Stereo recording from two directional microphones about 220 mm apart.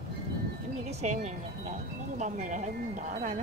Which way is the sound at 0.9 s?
30° right (ahead or behind).